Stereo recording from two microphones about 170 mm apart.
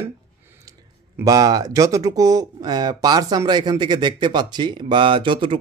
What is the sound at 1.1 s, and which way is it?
Speech, 20° right (ahead or behind).